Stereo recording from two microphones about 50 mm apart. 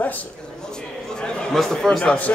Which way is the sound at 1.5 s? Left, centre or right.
Centre.